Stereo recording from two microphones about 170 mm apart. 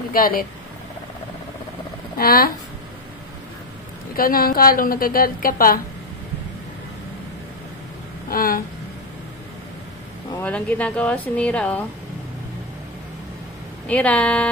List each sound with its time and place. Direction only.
0.1 s a woman's voice: 55° left (ahead or behind)
2.1 s a woman's voice: 60° left (ahead or behind)
4.1 s a woman's voice: 60° left (ahead or behind)
8.3 s a woman's voice: 55° left (ahead or behind)
10.4 s speech: 10° left (ahead or behind)
13.8 s speech: 10° left (ahead or behind)